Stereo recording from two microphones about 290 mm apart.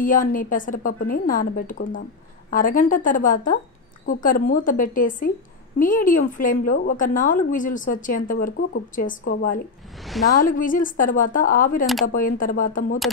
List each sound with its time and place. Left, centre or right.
0.0 s a woman's voice: left
11.8 s speech: centre
12.1 s a woman's voice: left